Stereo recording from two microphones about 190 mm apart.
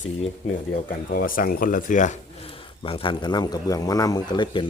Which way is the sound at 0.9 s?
45° left (ahead or behind).